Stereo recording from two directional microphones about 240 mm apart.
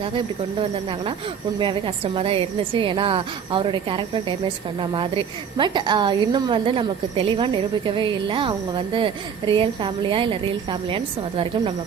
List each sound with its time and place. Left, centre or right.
2.1 s a woman's voice: right